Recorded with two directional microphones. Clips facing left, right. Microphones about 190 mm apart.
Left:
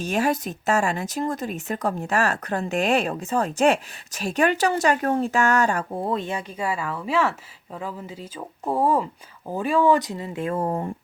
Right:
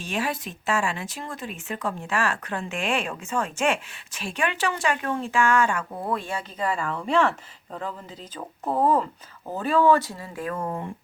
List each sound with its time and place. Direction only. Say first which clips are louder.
0.0 s speech: left 6 dB; 40° left (ahead or behind)